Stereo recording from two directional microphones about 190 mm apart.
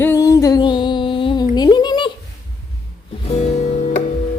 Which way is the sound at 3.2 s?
35° left (ahead or behind).